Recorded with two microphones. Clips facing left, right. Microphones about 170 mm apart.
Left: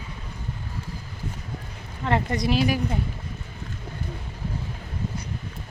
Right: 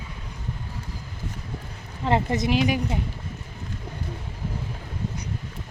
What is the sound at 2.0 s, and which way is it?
Speech, 25° right (ahead or behind).